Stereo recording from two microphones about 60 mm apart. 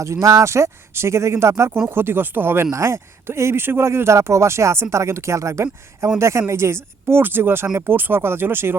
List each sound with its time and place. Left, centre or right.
0.0 s speech: right
1.9 s speech: right
2.6 s speech: right